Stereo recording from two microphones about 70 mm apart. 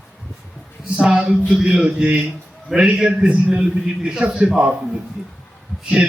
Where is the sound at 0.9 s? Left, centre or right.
Centre.